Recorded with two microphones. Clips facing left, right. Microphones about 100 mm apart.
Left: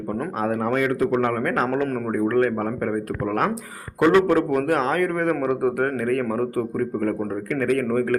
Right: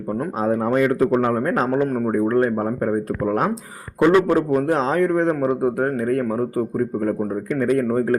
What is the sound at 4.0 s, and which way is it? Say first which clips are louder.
Speech: right 1 dB; 10° right (ahead or behind).